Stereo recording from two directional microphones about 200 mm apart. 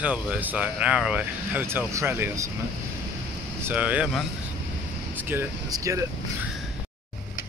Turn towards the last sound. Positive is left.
turn(degrees=-15)  # may be behind; listen again after turning